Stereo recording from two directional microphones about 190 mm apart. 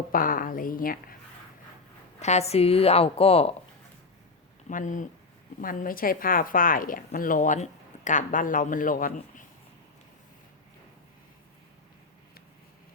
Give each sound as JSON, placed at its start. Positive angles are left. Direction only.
{"t": 0.1, "sound": "a woman's voice", "side_deg": 45}
{"t": 2.1, "sound": "a woman's voice", "side_deg": 35}
{"t": 4.7, "sound": "a woman's voice", "side_deg": 40}